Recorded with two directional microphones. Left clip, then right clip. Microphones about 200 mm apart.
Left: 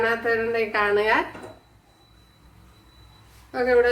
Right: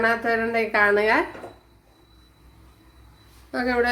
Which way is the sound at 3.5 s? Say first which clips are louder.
Left 3 dB; 55° right (ahead or behind).